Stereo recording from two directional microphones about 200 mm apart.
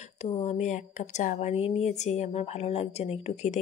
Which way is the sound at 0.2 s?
35° left (ahead or behind).